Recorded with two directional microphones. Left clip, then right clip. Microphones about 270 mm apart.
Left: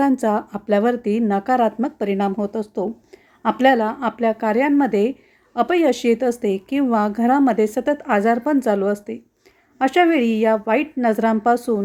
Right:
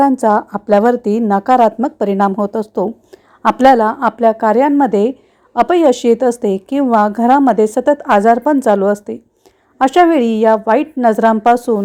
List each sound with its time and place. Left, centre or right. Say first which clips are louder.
0.0 s a woman's voice: right 7 dB; centre